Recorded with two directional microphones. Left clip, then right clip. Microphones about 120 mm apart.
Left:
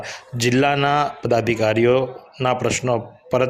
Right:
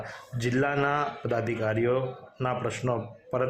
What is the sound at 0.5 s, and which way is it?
Speech, 40° left (ahead or behind).